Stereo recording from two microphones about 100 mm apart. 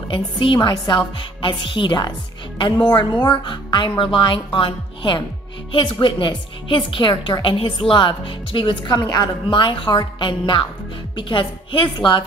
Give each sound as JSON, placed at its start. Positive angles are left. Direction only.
{"t": 0.1, "sound": "a woman's voice", "side_deg": 55}
{"t": 9.5, "sound": "a woman's voice", "side_deg": 60}